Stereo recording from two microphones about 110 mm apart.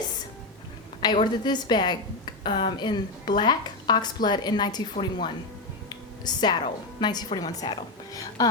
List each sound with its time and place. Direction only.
1.2 s speech: 40° left (ahead or behind)
5.9 s a sound: 40° left (ahead or behind)
7.0 s speech: 40° left (ahead or behind)